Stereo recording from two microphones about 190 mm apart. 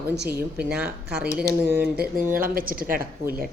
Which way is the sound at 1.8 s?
55° right (ahead or behind).